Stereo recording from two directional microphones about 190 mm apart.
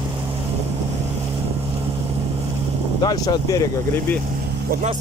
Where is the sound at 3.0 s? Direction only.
20° left (ahead or behind).